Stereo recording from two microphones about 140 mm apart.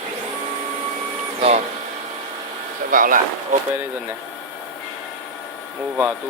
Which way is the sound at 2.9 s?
75° right (ahead or behind).